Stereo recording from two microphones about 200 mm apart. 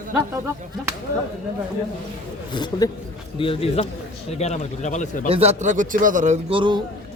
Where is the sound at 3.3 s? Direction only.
25° left (ahead or behind).